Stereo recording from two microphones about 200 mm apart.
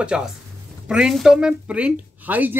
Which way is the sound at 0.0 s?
5° right (ahead or behind).